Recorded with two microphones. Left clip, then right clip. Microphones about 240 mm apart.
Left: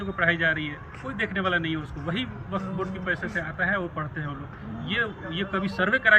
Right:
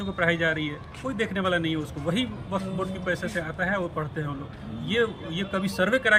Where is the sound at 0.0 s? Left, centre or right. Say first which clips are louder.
Left 1 dB; centre.